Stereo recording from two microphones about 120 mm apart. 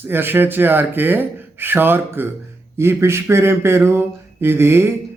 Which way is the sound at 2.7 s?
20° right (ahead or behind).